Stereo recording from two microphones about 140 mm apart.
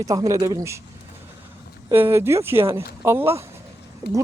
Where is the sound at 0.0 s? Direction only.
25° right (ahead or behind).